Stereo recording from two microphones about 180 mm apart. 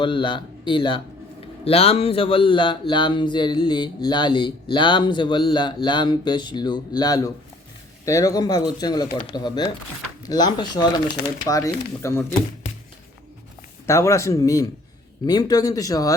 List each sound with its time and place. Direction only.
0.0 s speech: 25° left (ahead or behind)
13.8 s speech: 15° left (ahead or behind)